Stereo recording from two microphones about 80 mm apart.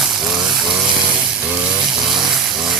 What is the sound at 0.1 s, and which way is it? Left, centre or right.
Frying, centre.